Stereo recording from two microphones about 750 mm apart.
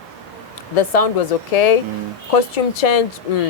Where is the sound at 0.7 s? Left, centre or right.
Left.